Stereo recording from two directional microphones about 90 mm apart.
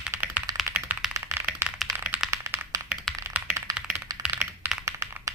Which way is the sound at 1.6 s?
30° right (ahead or behind).